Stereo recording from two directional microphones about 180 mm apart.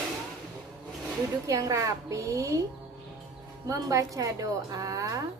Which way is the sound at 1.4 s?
15° right (ahead or behind).